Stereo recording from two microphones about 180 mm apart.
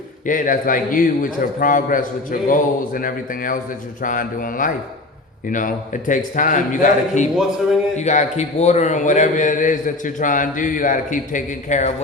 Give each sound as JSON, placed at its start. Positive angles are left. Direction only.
{"t": 0.3, "sound": "a man's voice", "side_deg": 50}